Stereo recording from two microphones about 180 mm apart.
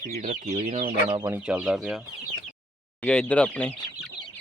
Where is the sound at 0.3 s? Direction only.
40° right (ahead or behind).